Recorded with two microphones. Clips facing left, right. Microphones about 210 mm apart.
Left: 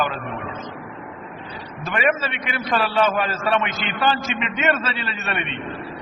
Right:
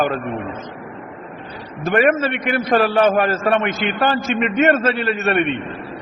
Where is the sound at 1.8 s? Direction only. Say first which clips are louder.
Right 7 dB; 55° right (ahead or behind).